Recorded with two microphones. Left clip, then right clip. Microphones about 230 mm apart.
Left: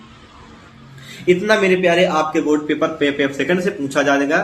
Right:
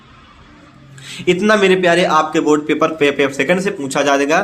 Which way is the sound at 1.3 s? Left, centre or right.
Right.